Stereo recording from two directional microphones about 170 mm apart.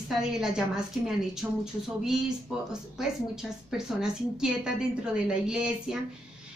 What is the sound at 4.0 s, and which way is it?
A woman's voice, 5° right (ahead or behind).